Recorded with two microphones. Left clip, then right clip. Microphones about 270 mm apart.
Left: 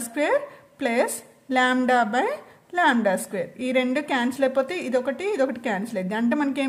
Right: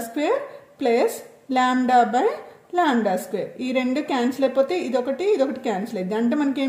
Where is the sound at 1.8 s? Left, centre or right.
Left.